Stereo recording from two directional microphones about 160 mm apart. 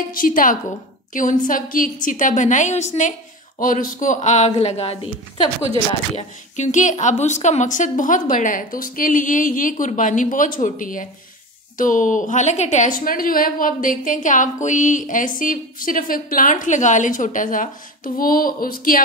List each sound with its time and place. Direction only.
0.1 s a woman's voice: 60° left (ahead or behind); by 5.1 s 40° left (ahead or behind)
6.1 s a woman's voice: 50° left (ahead or behind)